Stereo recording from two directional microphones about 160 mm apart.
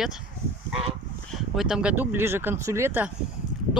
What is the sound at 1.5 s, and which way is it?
Speech, 5° right (ahead or behind).